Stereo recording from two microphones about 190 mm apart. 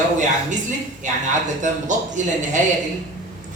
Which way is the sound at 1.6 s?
40° right (ahead or behind).